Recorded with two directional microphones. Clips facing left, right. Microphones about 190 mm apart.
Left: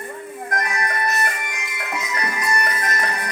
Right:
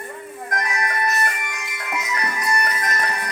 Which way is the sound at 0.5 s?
35° left (ahead or behind).